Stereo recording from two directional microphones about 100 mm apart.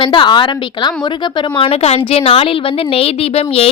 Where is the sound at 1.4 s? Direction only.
65° left (ahead or behind).